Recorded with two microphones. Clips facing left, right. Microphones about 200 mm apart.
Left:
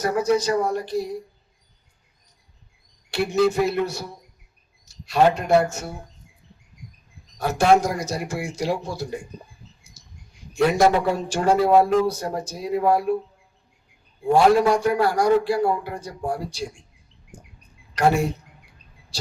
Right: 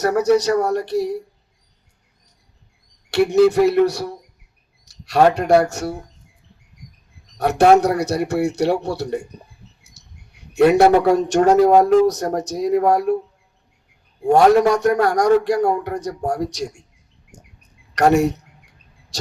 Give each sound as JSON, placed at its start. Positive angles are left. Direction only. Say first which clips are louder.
{"t": 0.0, "sound": "a man's voice", "louder": "right 5 dB", "side_deg": -70}
{"t": 3.1, "sound": "a man's voice", "louder": "right 6 dB", "side_deg": -70}
{"t": 7.3, "sound": "a man's voice", "louder": "right 5 dB", "side_deg": -65}
{"t": 9.8, "sound": "a sound", "louder": "even", "side_deg": -65}
{"t": 11.6, "sound": "speech", "louder": "right 1 dB", "side_deg": -40}
{"t": 12.0, "sound": "a man's voice", "louder": "right 6 dB", "side_deg": -75}
{"t": 14.6, "sound": "a man's voice", "louder": "right 3 dB", "side_deg": -75}
{"t": 17.6, "sound": "a sound", "louder": "right 4 dB", "side_deg": -75}